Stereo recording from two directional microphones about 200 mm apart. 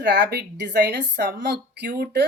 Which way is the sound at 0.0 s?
60° right (ahead or behind).